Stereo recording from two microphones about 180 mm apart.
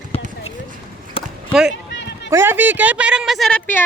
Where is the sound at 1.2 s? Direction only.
30° left (ahead or behind).